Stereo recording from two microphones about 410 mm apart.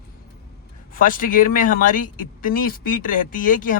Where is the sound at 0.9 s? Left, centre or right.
Centre.